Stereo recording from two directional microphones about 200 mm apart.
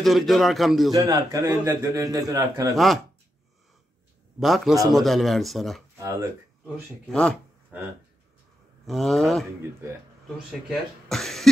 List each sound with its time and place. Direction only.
0.0 s a man's voice: centre (ahead or behind)
0.9 s a man's voice: 15° right (ahead or behind)
4.4 s a man's voice: centre (ahead or behind)
5.9 s speech: 15° right (ahead or behind)
7.1 s a man's voice: 5° left (ahead or behind)
8.8 s a man's voice: centre (ahead or behind)
10.7 s a man's voice: centre (ahead or behind)